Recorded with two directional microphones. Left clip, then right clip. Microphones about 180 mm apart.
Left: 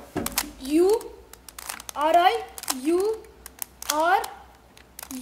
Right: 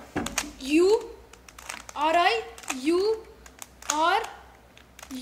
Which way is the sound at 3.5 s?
20° left (ahead or behind).